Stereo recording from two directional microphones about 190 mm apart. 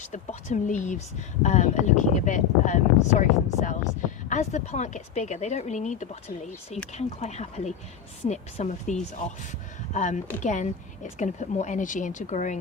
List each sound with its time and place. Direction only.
0.0 s speech: 40° left (ahead or behind)